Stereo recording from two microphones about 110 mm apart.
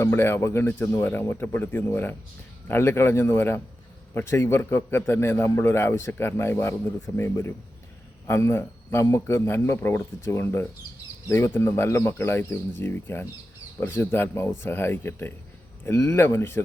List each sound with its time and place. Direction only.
0.0 s a man's voice: 20° left (ahead or behind)